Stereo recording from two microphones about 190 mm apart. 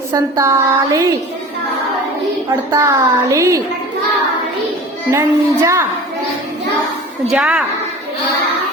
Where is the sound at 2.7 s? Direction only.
15° right (ahead or behind).